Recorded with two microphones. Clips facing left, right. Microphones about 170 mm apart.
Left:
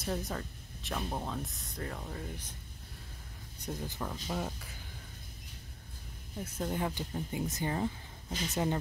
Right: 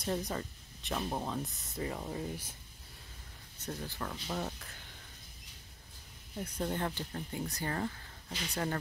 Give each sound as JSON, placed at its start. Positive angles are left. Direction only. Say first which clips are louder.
{"t": 0.0, "sound": "speech", "louder": "right 1 dB", "side_deg": 0}
{"t": 3.5, "sound": "speech", "louder": "left 2 dB", "side_deg": 15}
{"t": 6.4, "sound": "speech", "louder": "left 1 dB", "side_deg": 5}